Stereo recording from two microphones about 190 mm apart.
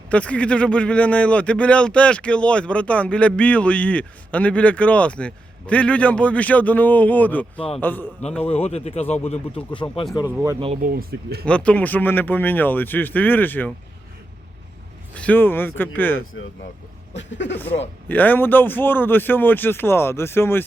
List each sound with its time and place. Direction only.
0.1 s a man's voice: 5° left (ahead or behind)
8.4 s speech: 30° left (ahead or behind)
10.2 s speech: 10° right (ahead or behind)
10.8 s speech: 55° right (ahead or behind)
11.4 s a man's voice: 5° left (ahead or behind)
15.1 s a man's voice: 10° left (ahead or behind)
17.2 s speech: 70° left (ahead or behind)
18.1 s a man's voice: 10° left (ahead or behind)